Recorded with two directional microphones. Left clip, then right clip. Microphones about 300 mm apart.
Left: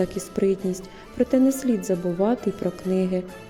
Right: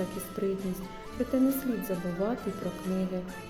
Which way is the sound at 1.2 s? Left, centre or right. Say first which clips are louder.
Left 10 dB; left.